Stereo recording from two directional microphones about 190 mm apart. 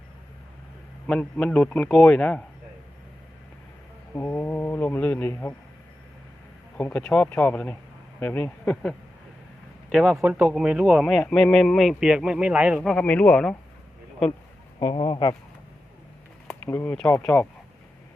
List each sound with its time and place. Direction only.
1.0 s speech: 5° left (ahead or behind)
4.1 s speech: 10° left (ahead or behind)
6.7 s speech: 10° left (ahead or behind)
14.8 s speech: 25° left (ahead or behind)
16.6 s speech: 10° left (ahead or behind)